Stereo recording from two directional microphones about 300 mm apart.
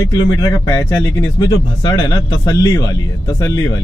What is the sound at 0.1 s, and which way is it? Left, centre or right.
Speech, centre.